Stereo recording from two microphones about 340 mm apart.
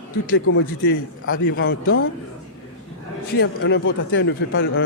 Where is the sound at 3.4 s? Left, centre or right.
Left.